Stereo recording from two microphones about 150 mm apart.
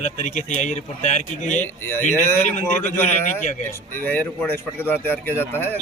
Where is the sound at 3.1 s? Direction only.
55° left (ahead or behind).